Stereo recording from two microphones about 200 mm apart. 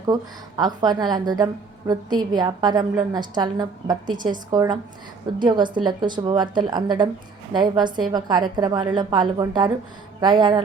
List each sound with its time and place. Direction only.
0.1 s a woman's voice: 20° right (ahead or behind)